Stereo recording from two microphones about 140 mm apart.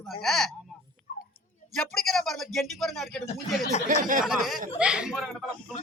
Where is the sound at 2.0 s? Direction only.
Centre (ahead or behind).